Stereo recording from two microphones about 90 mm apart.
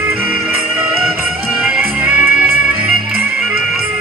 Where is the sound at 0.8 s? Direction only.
10° right (ahead or behind).